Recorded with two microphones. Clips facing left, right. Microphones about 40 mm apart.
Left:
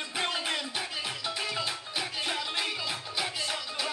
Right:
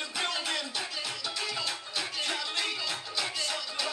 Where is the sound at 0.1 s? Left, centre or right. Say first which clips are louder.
Left 2 dB; left.